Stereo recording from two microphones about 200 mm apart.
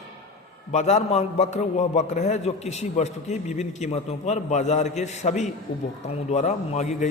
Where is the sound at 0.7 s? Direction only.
35° left (ahead or behind).